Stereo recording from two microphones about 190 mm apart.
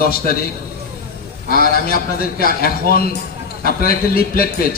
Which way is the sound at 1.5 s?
50° left (ahead or behind).